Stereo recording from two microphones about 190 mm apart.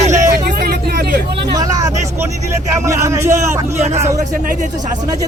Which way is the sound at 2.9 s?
15° right (ahead or behind).